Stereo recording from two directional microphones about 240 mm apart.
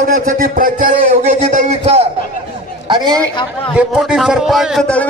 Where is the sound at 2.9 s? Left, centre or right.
Centre.